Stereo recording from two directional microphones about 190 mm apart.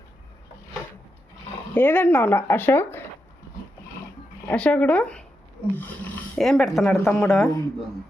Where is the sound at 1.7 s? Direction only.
10° left (ahead or behind).